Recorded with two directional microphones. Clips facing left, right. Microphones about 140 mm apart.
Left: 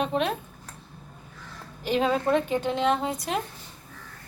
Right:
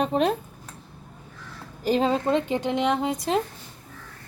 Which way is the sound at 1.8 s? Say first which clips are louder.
Right 2 dB; 35° right (ahead or behind).